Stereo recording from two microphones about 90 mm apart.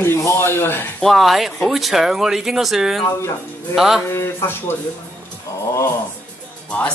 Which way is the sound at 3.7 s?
5° right (ahead or behind).